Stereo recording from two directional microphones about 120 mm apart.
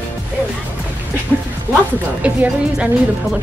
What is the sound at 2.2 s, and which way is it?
Speech, 10° right (ahead or behind).